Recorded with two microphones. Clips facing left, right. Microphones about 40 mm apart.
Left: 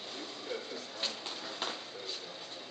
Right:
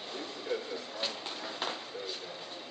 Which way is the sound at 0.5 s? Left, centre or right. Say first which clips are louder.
Right 5 dB; centre.